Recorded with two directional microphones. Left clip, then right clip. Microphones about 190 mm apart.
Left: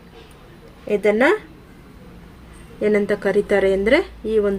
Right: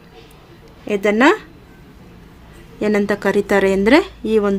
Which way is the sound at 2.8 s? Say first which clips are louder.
Right 1 dB; 55° right (ahead or behind).